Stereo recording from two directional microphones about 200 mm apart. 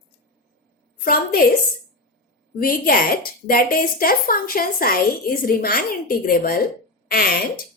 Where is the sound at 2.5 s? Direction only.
45° left (ahead or behind).